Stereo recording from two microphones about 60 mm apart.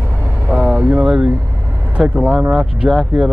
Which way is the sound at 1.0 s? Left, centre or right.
Centre.